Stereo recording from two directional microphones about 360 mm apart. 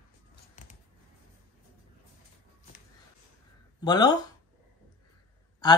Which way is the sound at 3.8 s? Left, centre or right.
Centre.